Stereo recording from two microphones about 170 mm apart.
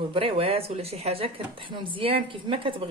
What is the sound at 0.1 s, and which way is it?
Speech, 35° right (ahead or behind).